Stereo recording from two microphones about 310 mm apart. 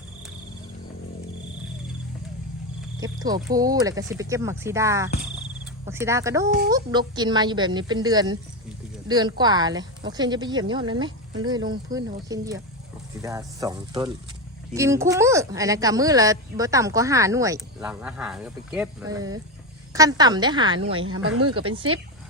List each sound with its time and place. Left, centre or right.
3.0 s speech: centre
21.0 s speech: right
21.5 s speech: centre